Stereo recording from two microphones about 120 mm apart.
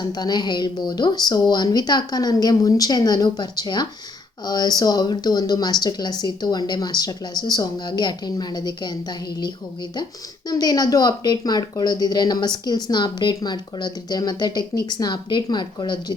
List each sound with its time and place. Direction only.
0.1 s speech: 35° left (ahead or behind)